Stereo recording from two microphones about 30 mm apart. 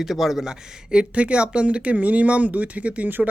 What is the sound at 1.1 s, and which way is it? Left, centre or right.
Speech, right.